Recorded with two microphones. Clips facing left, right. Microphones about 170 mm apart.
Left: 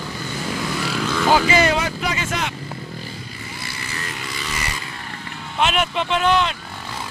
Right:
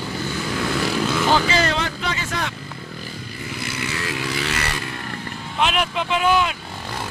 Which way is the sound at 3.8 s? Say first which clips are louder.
Right 6 dB; 75° right (ahead or behind).